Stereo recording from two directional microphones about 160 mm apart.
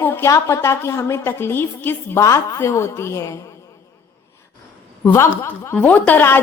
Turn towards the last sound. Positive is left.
turn(degrees=10)  # may be behind; listen again after turning